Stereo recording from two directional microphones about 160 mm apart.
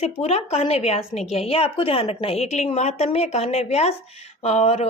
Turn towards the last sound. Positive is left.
turn(degrees=40)  # may be behind; listen again after turning